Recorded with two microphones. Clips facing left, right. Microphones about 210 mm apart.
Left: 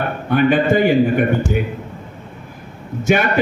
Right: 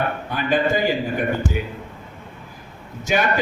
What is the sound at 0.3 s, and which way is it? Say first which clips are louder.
Speech: left 8 dB; 60° left (ahead or behind).